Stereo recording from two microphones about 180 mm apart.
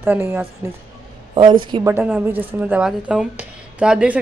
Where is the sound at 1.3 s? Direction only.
25° right (ahead or behind).